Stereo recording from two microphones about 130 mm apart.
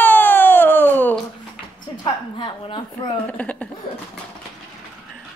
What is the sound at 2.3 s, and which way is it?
Speech, 35° left (ahead or behind).